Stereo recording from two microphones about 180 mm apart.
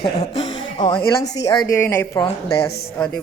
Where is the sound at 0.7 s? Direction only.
25° left (ahead or behind).